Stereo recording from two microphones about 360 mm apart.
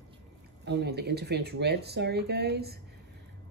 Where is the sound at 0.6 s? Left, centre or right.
Right.